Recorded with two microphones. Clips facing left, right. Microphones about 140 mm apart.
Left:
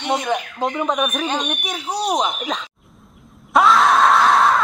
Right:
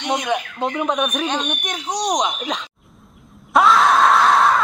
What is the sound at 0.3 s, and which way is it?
Speech, centre (ahead or behind).